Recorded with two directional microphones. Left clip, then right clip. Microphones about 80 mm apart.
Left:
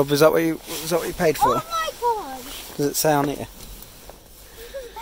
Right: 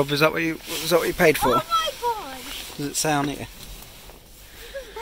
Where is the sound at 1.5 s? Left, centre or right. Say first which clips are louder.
Right 2 dB; centre.